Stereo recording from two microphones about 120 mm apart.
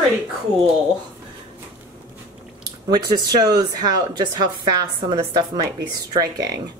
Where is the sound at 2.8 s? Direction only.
35° right (ahead or behind).